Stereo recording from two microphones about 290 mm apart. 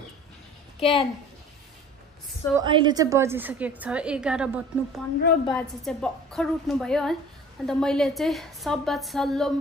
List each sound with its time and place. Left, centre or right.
0.7 s a woman's voice: centre
2.5 s a woman's voice: centre